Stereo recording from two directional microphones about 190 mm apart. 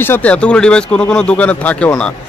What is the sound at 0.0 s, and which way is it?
Speech, 10° left (ahead or behind).